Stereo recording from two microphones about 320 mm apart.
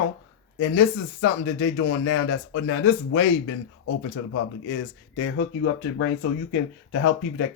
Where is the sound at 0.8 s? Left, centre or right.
Left.